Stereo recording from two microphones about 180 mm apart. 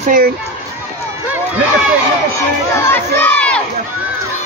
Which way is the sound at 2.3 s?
15° left (ahead or behind).